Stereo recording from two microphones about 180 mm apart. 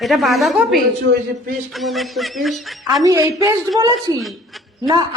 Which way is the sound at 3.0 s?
20° right (ahead or behind).